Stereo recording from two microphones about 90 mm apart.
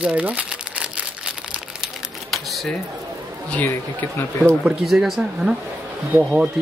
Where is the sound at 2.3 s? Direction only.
Centre (ahead or behind).